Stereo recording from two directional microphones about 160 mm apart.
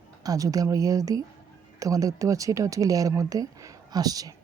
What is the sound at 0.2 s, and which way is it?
Speech, 20° right (ahead or behind).